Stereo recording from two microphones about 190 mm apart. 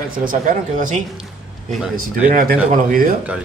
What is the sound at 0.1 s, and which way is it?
Speech, 45° right (ahead or behind).